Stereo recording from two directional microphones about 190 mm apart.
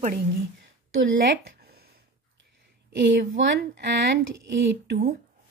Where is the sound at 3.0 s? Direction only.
70° right (ahead or behind).